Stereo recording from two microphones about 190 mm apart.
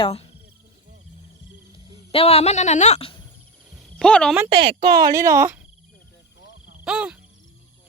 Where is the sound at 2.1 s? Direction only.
30° left (ahead or behind).